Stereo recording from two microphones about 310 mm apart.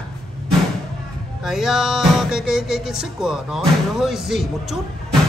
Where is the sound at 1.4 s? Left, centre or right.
Centre.